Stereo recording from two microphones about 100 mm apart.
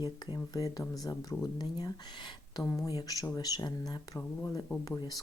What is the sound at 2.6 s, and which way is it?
Speech, 25° left (ahead or behind).